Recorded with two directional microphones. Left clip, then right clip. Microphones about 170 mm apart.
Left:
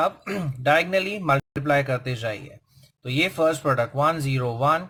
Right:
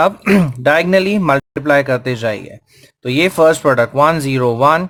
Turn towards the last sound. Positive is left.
turn(degrees=-30)  # may be behind; listen again after turning